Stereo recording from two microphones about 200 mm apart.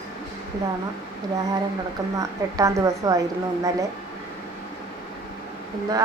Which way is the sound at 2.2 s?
15° right (ahead or behind).